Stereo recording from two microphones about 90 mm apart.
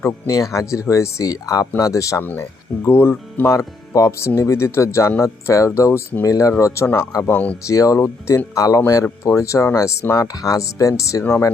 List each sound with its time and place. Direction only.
0.0 s speech: 35° left (ahead or behind)
2.2 s speech: 20° left (ahead or behind); by 6.8 s 40° left (ahead or behind)
7.3 s speech: 20° left (ahead or behind)
7.7 s speech: 40° left (ahead or behind)
10.3 s speech: 40° left (ahead or behind)